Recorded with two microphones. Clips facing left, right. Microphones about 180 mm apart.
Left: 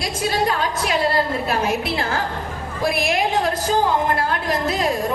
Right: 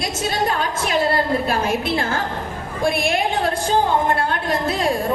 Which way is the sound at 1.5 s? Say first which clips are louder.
Right 1 dB; 30° right (ahead or behind).